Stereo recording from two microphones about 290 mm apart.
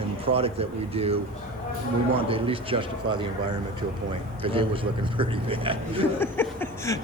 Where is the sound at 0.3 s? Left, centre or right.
Centre.